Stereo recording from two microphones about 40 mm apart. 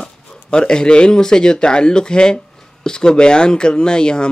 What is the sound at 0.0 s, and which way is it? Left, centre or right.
Speech, left.